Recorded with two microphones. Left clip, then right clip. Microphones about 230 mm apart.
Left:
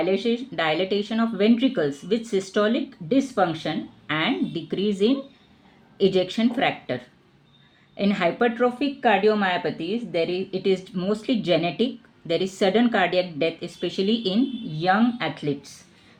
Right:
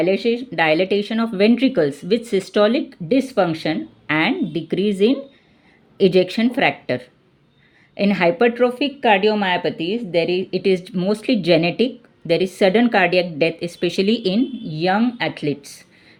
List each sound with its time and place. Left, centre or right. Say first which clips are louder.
0.0 s speech: right 5 dB; right